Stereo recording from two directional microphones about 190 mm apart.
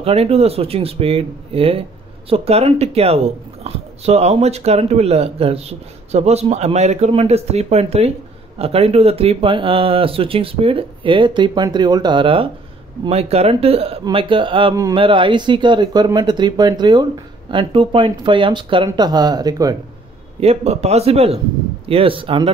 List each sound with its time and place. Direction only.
0.0 s speech: 30° right (ahead or behind)
20.3 s speech: 35° right (ahead or behind)